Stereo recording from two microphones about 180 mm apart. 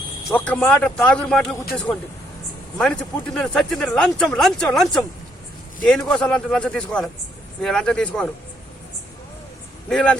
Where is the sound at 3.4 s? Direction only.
5° left (ahead or behind).